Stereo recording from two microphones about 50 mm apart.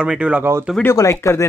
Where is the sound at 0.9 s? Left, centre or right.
Left.